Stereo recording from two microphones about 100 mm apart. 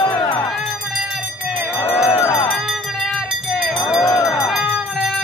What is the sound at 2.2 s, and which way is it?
Music, 30° left (ahead or behind).